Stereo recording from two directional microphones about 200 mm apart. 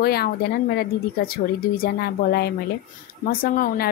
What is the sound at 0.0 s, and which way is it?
A woman's voice, 50° left (ahead or behind).